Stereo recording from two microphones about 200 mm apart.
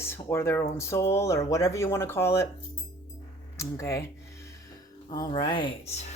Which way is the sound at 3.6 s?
15° left (ahead or behind).